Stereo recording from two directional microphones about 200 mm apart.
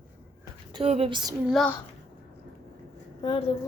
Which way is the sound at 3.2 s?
25° left (ahead or behind).